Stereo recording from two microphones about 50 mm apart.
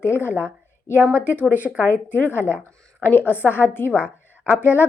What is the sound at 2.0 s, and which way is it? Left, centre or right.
A woman's voice, left.